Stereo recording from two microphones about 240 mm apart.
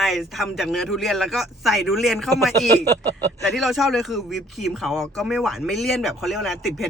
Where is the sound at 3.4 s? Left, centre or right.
Centre.